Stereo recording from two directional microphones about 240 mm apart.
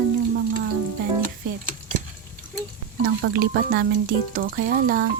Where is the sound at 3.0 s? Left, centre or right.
Right.